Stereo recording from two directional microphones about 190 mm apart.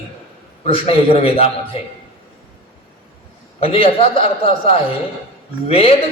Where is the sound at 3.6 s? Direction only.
30° left (ahead or behind).